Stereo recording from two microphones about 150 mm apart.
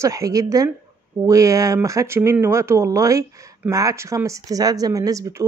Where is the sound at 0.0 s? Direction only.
20° right (ahead or behind).